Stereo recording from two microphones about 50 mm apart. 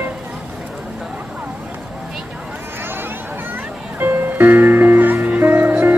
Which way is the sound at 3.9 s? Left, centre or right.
Right.